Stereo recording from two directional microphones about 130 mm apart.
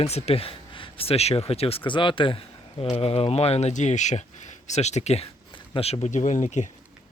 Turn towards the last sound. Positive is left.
turn(degrees=70)  # may be behind; listen again after turning